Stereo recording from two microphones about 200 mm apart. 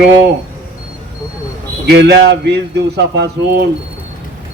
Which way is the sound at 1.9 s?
55° right (ahead or behind).